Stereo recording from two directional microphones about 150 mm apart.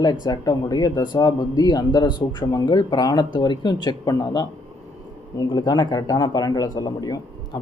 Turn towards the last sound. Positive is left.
turn(degrees=25)  # may be behind; listen again after turning